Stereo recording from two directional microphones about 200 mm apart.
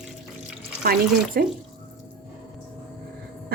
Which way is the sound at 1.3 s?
50° right (ahead or behind).